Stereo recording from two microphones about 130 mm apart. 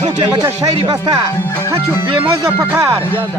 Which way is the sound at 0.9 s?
30° right (ahead or behind).